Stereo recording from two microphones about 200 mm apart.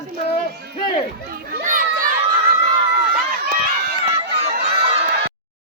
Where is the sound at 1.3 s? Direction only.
45° right (ahead or behind).